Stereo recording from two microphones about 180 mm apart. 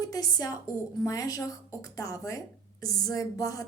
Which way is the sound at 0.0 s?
20° left (ahead or behind).